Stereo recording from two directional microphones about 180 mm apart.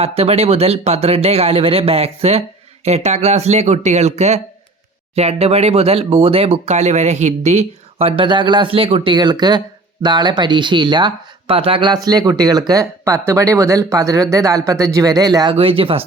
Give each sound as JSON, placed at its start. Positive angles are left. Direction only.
{"t": 0.0, "sound": "speech", "side_deg": -35}
{"t": 15.5, "sound": "speech", "side_deg": -30}